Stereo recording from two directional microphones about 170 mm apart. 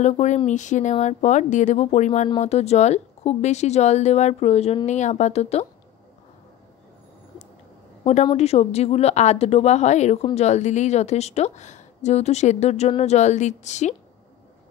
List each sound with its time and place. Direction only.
0.0 s a woman's voice: 45° left (ahead or behind)
8.0 s a woman's voice: 40° left (ahead or behind)